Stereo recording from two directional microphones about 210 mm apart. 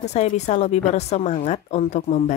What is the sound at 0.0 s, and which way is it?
A woman's voice, 30° left (ahead or behind).